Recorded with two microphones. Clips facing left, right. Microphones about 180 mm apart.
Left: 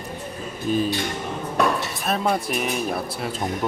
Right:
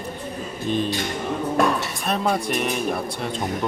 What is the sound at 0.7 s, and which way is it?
Speech, 5° left (ahead or behind).